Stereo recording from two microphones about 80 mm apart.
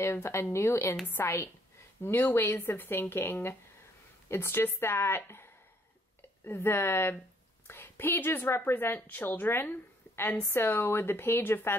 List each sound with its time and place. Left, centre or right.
0.0 s a woman's voice: left